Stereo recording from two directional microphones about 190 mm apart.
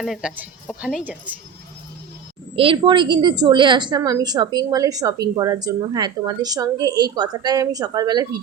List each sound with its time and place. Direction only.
0.0 s speech: 5° right (ahead or behind)
2.6 s a woman's voice: 25° right (ahead or behind)